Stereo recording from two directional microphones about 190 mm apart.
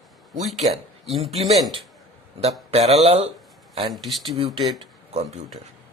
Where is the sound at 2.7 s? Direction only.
35° right (ahead or behind).